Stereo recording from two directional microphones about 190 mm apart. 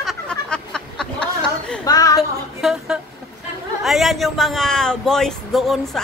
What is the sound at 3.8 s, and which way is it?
Speech, centre (ahead or behind).